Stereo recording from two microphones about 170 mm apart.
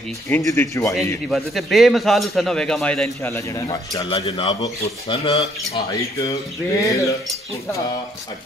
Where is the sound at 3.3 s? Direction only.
15° left (ahead or behind); by 5.8 s 35° left (ahead or behind).